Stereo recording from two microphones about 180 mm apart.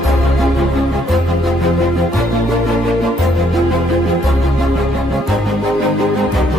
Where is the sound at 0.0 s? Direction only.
Centre (ahead or behind).